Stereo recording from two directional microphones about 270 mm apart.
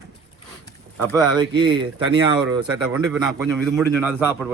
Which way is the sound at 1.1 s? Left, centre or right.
Centre.